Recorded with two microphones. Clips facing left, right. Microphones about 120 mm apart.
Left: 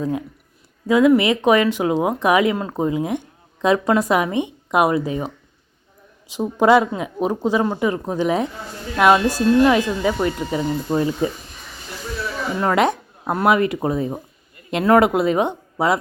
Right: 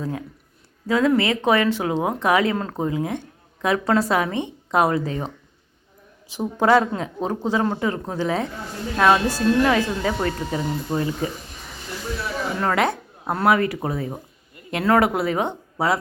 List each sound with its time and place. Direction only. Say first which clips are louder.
0.0 s speech: left 5 dB; 20° left (ahead or behind)
6.3 s speech: left 3 dB; 15° left (ahead or behind)
12.5 s speech: left 4 dB; 20° left (ahead or behind)